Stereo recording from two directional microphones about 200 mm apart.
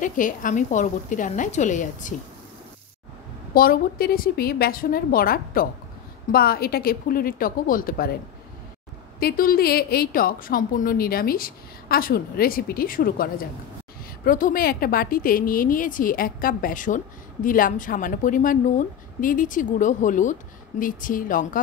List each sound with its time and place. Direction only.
0.0 s a woman's voice: 40° left (ahead or behind)
3.5 s a woman's voice: 45° left (ahead or behind)
9.2 s a woman's voice: 45° left (ahead or behind)